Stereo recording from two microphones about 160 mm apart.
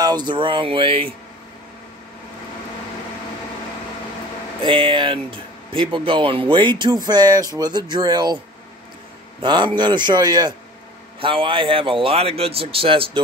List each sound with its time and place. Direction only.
0.0 s a man's voice: 25° right (ahead or behind)
4.6 s speech: 30° right (ahead or behind)
9.4 s a man's voice: 30° right (ahead or behind)